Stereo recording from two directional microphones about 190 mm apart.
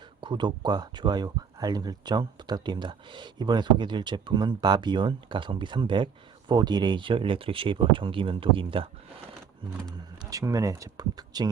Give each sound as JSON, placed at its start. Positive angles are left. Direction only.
{"t": 0.2, "sound": "speech", "side_deg": -25}
{"t": 10.2, "sound": "speech", "side_deg": -15}